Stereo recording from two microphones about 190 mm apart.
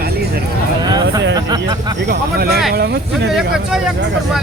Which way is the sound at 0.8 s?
20° right (ahead or behind).